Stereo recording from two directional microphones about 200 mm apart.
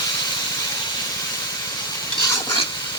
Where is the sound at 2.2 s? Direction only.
20° left (ahead or behind).